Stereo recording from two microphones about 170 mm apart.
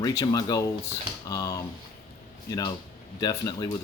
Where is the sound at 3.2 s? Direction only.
20° left (ahead or behind).